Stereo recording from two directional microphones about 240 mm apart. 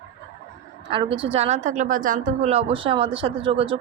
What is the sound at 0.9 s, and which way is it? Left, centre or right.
A woman's voice, right.